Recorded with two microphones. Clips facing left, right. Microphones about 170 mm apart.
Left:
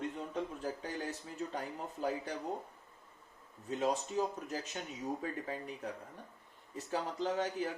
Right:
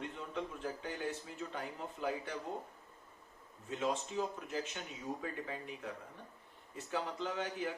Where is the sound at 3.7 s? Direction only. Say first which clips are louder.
Left 3 dB; 40° left (ahead or behind).